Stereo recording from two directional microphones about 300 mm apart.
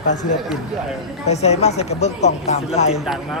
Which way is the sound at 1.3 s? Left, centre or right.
Left.